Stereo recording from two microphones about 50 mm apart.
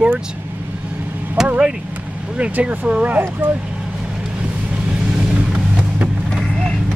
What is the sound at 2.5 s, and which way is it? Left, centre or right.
Speech, right.